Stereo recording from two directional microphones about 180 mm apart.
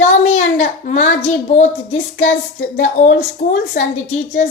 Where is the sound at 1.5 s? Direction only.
40° left (ahead or behind).